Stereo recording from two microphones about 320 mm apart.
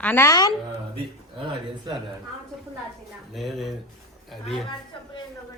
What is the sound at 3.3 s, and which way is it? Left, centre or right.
A woman's voice, centre.